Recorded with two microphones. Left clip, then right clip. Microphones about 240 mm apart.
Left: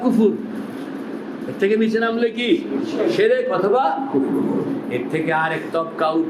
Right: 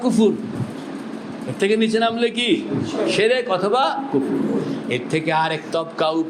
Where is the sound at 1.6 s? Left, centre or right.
Right.